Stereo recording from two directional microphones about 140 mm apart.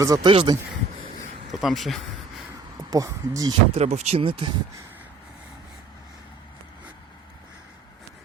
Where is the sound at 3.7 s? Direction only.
50° right (ahead or behind).